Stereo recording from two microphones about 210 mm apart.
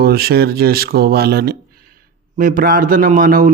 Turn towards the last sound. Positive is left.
turn(degrees=-45)  # may be behind; listen again after turning